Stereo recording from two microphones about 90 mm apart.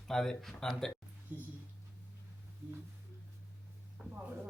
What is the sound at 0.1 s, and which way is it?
Speech, 5° left (ahead or behind).